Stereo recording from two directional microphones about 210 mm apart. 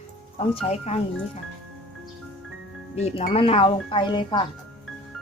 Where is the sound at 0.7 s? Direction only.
30° left (ahead or behind).